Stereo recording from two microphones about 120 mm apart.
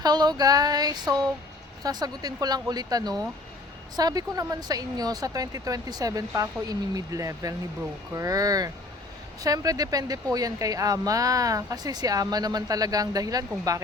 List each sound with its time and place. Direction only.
0.0 s speech: 35° right (ahead or behind)